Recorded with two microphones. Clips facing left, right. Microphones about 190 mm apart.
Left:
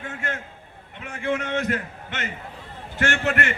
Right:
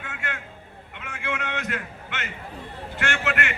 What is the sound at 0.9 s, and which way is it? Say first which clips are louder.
A man's voice: left 6 dB; 40° left (ahead or behind).